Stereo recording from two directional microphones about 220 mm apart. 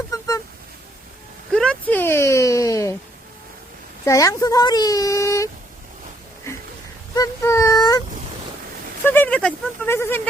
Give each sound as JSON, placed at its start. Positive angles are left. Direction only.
{"t": 0.1, "sound": "honk", "side_deg": 15}
{"t": 1.5, "sound": "a sound", "side_deg": 5}
{"t": 4.0, "sound": "speech", "side_deg": 15}
{"t": 7.2, "sound": "baby cry", "side_deg": 15}
{"t": 9.0, "sound": "speech", "side_deg": 10}